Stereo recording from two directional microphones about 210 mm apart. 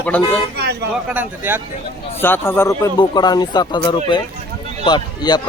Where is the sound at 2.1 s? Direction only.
10° left (ahead or behind).